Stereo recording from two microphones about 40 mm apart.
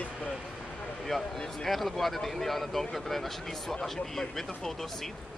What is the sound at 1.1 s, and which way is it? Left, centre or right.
Speech, centre.